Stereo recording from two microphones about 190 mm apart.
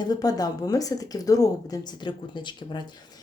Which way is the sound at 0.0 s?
20° left (ahead or behind).